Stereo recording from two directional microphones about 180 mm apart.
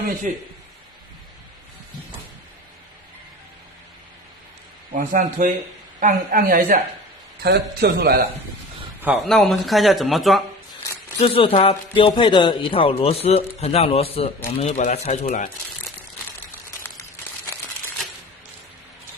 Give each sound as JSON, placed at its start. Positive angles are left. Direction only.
{"t": 0.3, "sound": "a woman's voice", "side_deg": -45}
{"t": 4.9, "sound": "a woman's voice", "side_deg": -50}
{"t": 9.0, "sound": "speech", "side_deg": -5}
{"t": 11.2, "sound": "a man's voice", "side_deg": 30}